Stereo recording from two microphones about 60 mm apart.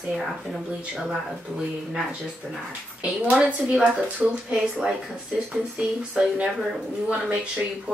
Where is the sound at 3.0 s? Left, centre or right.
Right.